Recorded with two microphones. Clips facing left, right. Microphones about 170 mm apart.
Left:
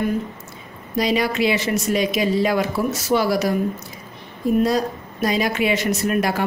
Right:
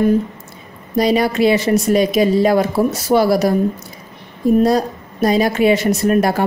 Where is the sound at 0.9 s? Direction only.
40° right (ahead or behind).